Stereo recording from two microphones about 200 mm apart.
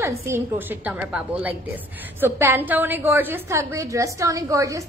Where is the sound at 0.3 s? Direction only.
10° right (ahead or behind).